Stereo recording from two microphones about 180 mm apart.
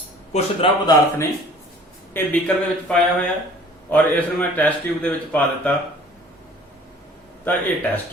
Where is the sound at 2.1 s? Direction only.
10° left (ahead or behind).